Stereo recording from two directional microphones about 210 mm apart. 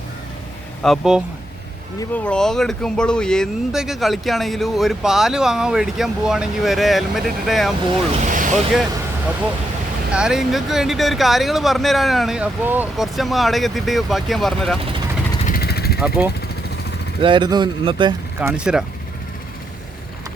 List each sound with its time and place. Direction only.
0.8 s speech: centre (ahead or behind)
8.2 s vehicle: 35° right (ahead or behind)
10.1 s speech: 5° right (ahead or behind)
15.4 s vehicle: 45° left (ahead or behind)
16.0 s speech: 5° right (ahead or behind)
17.2 s speech: 25° right (ahead or behind)
18.3 s speech: 5° right (ahead or behind)